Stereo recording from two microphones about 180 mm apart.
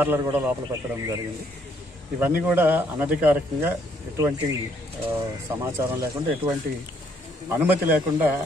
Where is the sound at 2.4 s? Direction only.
10° right (ahead or behind).